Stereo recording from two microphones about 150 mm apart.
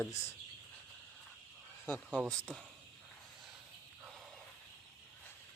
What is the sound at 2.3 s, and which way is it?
Speech, 5° left (ahead or behind).